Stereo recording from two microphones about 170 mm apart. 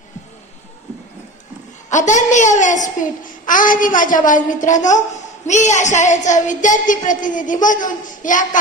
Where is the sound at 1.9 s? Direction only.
45° left (ahead or behind).